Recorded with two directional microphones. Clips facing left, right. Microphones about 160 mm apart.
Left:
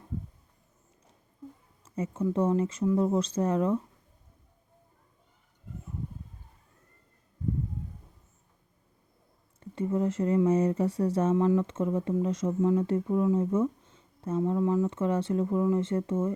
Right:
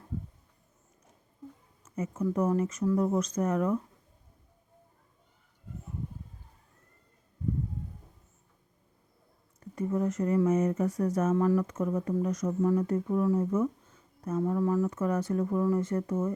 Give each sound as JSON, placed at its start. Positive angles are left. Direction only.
{"t": 1.8, "sound": "a sound", "side_deg": 30}
{"t": 2.2, "sound": "speech", "side_deg": 25}
{"t": 9.6, "sound": "speech", "side_deg": 25}